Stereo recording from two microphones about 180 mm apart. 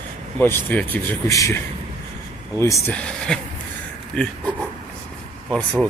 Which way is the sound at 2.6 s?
15° left (ahead or behind).